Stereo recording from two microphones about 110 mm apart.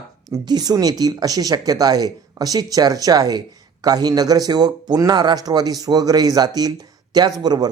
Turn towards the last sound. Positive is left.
turn(degrees=-40)  # may be behind; listen again after turning